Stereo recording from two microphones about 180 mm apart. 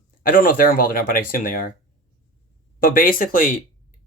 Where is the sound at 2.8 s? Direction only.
50° left (ahead or behind).